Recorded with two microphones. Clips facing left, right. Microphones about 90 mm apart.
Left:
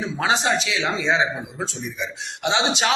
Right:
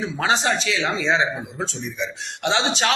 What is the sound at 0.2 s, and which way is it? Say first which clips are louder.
Speech: even; 15° left (ahead or behind).